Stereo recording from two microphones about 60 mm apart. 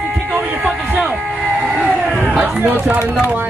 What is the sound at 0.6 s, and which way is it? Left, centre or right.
Speech, centre.